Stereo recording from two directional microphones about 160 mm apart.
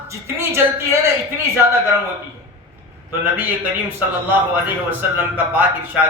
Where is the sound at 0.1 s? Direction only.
15° right (ahead or behind).